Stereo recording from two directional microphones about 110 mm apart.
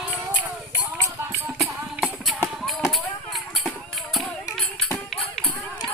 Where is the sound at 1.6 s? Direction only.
Centre (ahead or behind).